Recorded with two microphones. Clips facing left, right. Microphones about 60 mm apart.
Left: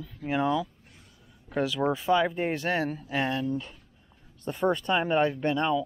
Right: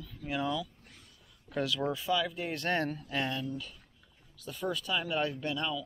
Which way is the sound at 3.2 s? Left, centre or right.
Left.